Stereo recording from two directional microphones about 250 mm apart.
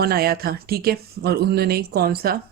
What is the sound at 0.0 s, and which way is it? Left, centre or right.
Speech, right.